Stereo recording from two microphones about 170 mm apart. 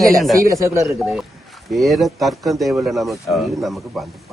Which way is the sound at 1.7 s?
Centre (ahead or behind).